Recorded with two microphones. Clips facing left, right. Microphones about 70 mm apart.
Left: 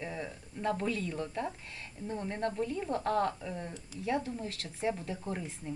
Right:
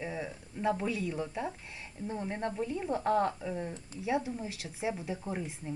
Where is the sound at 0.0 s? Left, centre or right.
Centre.